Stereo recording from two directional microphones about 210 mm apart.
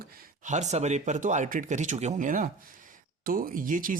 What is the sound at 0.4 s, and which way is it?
Speech, 35° right (ahead or behind).